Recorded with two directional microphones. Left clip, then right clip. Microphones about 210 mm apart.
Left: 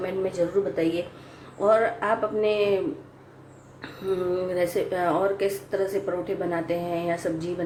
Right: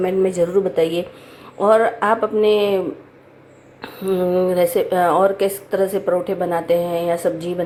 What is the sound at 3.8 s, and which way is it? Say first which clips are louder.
Speech: right 7 dB; 25° right (ahead or behind).